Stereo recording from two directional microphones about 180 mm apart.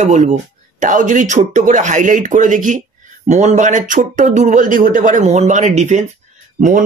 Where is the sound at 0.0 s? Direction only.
40° right (ahead or behind).